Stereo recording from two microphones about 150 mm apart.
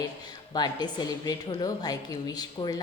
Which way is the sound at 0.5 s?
30° left (ahead or behind).